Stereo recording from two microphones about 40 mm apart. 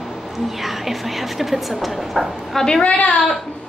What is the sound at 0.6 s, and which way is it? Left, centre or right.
Speech, centre.